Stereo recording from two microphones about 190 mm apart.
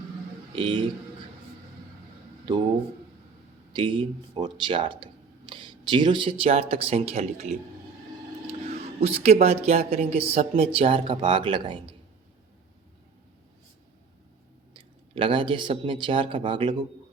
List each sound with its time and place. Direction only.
0.5 s speech: 25° right (ahead or behind)
3.7 s speech: 25° right (ahead or behind)
9.0 s a woman's voice: 30° right (ahead or behind)
14.7 s speech: 25° right (ahead or behind)